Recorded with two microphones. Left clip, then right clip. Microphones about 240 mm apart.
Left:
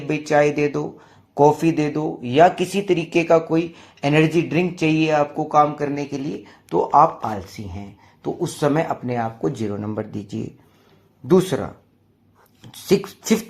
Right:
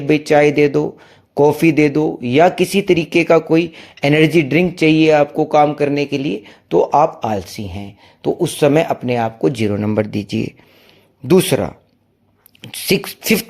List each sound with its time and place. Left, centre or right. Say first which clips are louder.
0.1 s speech: right 6 dB; right
2.3 s speech: right 2 dB; right
3.0 s speech: right 1 dB; right
7.5 s speech: right 7 dB; right
8.2 s speech: right 7 dB; right